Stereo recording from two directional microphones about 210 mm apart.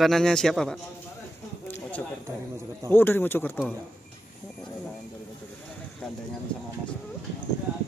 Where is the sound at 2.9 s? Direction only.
10° left (ahead or behind).